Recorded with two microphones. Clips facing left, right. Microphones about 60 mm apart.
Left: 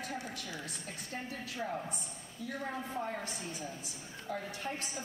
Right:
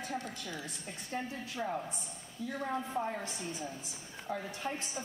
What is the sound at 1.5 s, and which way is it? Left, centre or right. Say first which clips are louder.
A woman's voice: right 1 dB; centre.